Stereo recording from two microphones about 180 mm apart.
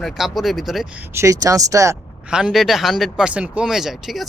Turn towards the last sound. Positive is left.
turn(degrees=0)  # may be behind; listen again after turning